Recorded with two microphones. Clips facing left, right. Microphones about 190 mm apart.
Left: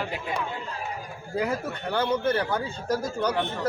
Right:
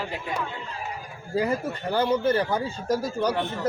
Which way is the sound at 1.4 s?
Centre (ahead or behind).